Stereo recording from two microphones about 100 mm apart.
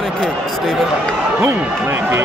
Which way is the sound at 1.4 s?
20° right (ahead or behind).